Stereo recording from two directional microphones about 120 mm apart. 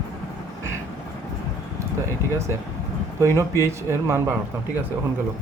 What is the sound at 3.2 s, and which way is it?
A man's voice, 25° right (ahead or behind).